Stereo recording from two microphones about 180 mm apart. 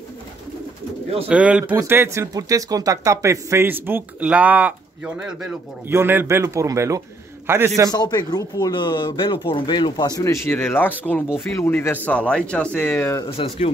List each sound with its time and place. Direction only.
1.3 s speech: 5° right (ahead or behind)
7.9 s speech: 20° left (ahead or behind)